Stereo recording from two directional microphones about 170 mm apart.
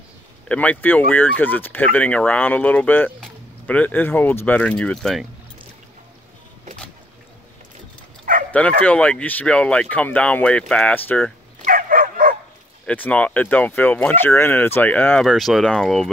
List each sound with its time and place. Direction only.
0.5 s speech: 10° left (ahead or behind)
8.5 s speech: 10° left (ahead or behind)
11.6 s dog: 55° right (ahead or behind)
12.8 s speech: 10° left (ahead or behind)